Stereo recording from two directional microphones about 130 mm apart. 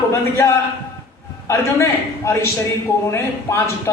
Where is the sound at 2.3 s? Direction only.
20° left (ahead or behind).